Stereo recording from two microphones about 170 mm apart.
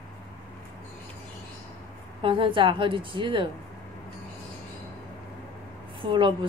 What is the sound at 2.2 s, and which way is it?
A woman's voice, 30° right (ahead or behind).